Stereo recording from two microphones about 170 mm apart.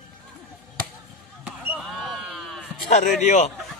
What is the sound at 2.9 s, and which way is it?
Speech, 45° left (ahead or behind).